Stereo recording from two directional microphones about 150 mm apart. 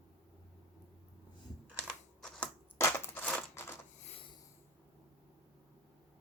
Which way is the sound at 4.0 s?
40° left (ahead or behind).